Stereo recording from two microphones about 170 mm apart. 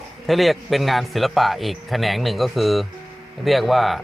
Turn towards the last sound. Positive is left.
turn(degrees=0)  # may be behind; listen again after turning